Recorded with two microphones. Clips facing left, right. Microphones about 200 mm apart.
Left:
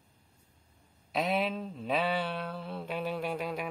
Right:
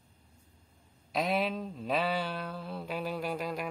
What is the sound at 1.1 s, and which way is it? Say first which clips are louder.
Mantra: even; centre (ahead or behind).